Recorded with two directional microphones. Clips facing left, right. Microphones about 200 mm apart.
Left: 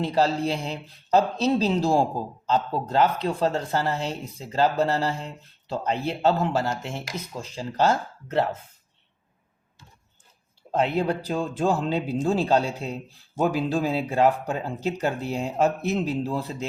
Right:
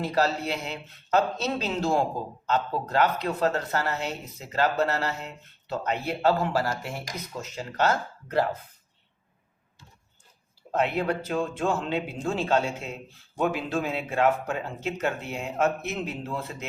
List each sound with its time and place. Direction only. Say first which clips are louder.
0.0 s speech: left 3 dB; 30° left (ahead or behind)
10.8 s speech: left 2 dB; 30° left (ahead or behind)